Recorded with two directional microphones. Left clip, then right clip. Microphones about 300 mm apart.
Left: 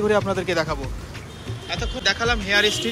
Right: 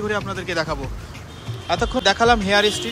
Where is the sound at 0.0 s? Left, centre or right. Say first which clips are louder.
Left 4 dB; centre.